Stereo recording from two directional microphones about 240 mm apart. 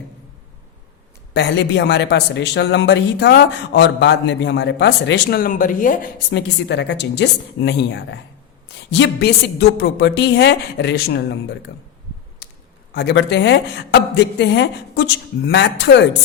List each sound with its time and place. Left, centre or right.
1.3 s a man's voice: left
12.9 s a man's voice: left